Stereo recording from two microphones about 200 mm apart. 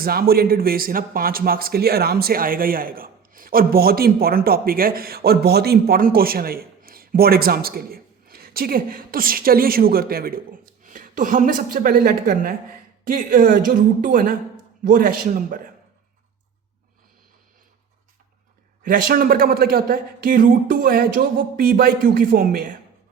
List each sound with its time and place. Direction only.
0.0 s speech: 50° right (ahead or behind)
18.8 s speech: 45° right (ahead or behind)